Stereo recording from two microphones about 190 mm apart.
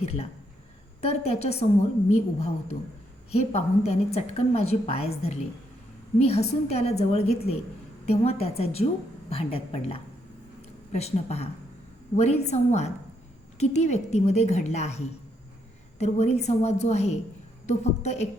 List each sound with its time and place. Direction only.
0.0 s a woman's voice: 30° left (ahead or behind)